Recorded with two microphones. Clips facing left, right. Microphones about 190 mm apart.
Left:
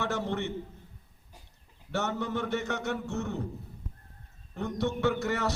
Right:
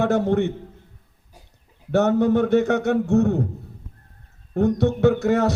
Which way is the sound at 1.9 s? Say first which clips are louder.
Right 14 dB; 60° right (ahead or behind).